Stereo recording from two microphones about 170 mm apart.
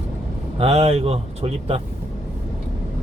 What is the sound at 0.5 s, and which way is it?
A man's voice, 35° right (ahead or behind).